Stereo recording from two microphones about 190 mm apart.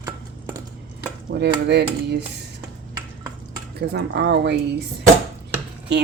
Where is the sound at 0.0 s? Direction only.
15° right (ahead or behind).